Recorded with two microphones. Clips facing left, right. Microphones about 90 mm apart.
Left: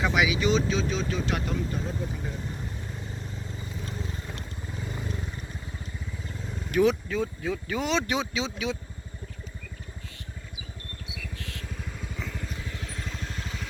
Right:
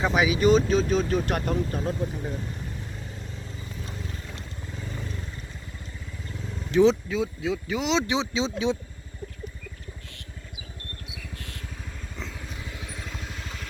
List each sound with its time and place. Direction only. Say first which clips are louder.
0.0 s speech: right 3 dB; 35° right (ahead or behind)
6.7 s speech: right 4 dB; 25° right (ahead or behind)
7.1 s speech: right 2 dB; 15° right (ahead or behind); by 8.8 s 30° right (ahead or behind)
12.1 s vehicle: left 1 dB; centre (ahead or behind)